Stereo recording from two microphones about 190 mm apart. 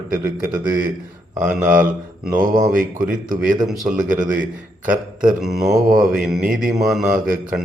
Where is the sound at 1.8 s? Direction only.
45° right (ahead or behind).